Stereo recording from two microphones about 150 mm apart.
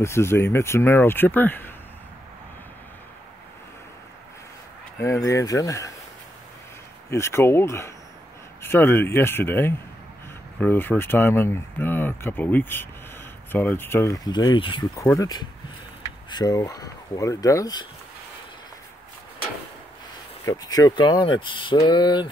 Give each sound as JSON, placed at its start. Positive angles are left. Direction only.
{"t": 0.0, "sound": "speech", "side_deg": 15}
{"t": 5.0, "sound": "speech", "side_deg": 20}
{"t": 7.1, "sound": "speech", "side_deg": 20}
{"t": 20.4, "sound": "speech", "side_deg": 25}